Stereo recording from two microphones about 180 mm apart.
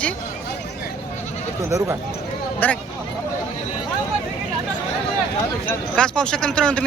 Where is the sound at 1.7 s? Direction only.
20° right (ahead or behind).